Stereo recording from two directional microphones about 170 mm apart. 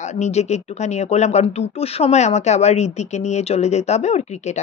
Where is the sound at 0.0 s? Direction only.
40° left (ahead or behind).